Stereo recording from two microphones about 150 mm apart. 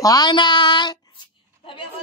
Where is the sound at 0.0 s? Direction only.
25° left (ahead or behind).